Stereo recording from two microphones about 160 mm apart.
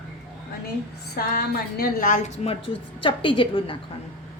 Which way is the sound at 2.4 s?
35° left (ahead or behind).